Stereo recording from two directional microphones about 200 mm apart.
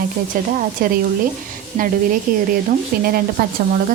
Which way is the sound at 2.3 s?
45° right (ahead or behind).